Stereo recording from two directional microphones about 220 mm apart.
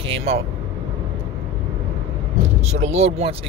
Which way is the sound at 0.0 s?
25° right (ahead or behind).